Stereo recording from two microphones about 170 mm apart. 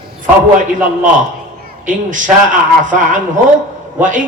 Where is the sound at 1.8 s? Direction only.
50° right (ahead or behind).